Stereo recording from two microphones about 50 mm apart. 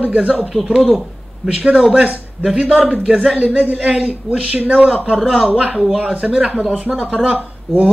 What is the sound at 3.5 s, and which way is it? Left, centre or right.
Speech, centre.